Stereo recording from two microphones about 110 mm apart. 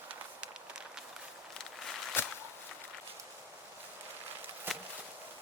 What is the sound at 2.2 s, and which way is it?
Walk, 20° left (ahead or behind).